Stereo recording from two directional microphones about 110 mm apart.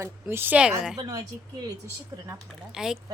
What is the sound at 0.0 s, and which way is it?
Speech, 20° right (ahead or behind).